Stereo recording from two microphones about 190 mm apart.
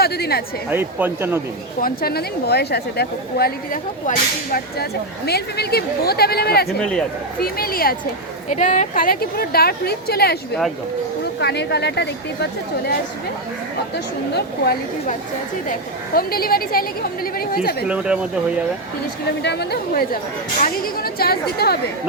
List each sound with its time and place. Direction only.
0.0 s a woman's voice: 55° left (ahead or behind)
0.7 s speech: 10° right (ahead or behind)
1.8 s a woman's voice: 50° left (ahead or behind)
6.7 s speech: 5° left (ahead or behind)
7.4 s a woman's voice: 50° left (ahead or behind)
11.3 s a woman's voice: 60° left (ahead or behind)
14.3 s a woman's voice: 55° left (ahead or behind)
17.8 s speech: 5° right (ahead or behind)
19.4 s a woman's voice: 60° left (ahead or behind)